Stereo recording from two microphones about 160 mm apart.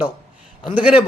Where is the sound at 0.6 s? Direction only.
30° left (ahead or behind).